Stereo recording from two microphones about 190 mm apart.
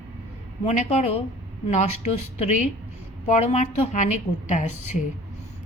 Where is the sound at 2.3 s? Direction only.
40° left (ahead or behind).